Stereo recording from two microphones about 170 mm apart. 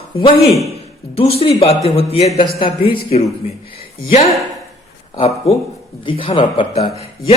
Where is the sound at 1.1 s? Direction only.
35° left (ahead or behind).